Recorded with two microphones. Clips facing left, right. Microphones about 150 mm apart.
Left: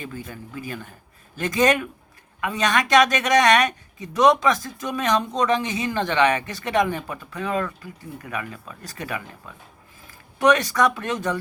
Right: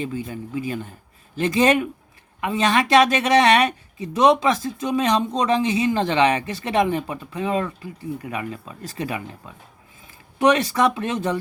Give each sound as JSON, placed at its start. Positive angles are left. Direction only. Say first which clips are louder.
{"t": 0.0, "sound": "speech", "louder": "right 7 dB", "side_deg": -25}
{"t": 10.3, "sound": "speech", "louder": "right 1 dB", "side_deg": -25}